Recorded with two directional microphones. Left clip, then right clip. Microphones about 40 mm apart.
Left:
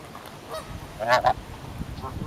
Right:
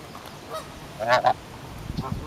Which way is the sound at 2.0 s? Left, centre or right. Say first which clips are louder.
Right 3 dB; centre.